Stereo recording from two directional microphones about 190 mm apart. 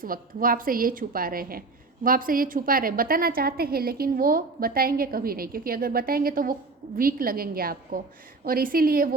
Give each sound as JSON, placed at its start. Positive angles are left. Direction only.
{"t": 0.0, "sound": "a woman's voice", "side_deg": -50}